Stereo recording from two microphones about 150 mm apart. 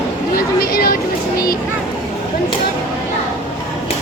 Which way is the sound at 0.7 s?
75° left (ahead or behind).